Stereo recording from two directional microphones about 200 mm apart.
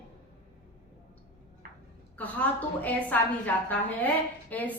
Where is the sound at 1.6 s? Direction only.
45° right (ahead or behind).